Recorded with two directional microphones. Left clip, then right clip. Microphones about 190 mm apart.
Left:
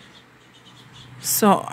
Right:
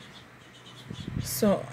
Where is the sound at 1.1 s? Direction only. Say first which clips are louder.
Left 8 dB; 35° left (ahead or behind).